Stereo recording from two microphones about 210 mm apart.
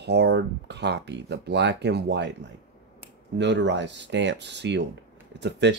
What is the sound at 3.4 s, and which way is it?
Speech, 55° right (ahead or behind).